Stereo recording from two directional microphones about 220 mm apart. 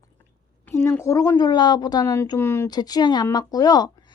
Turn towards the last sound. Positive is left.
turn(degrees=20)  # may be behind; listen again after turning